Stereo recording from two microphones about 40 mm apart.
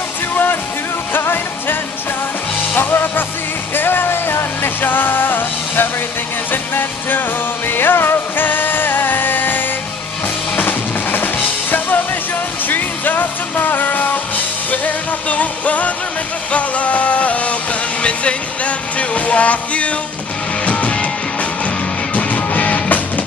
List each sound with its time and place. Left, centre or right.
0.3 s music: left
22.1 s music: left